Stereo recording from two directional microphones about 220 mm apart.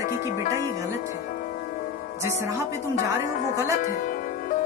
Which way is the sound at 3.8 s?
35° left (ahead or behind).